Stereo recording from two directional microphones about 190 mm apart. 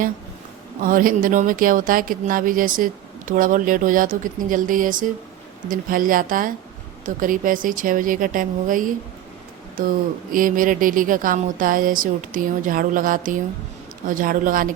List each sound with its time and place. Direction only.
0.8 s a woman's voice: 45° right (ahead or behind)
10.3 s a woman's voice: 45° right (ahead or behind)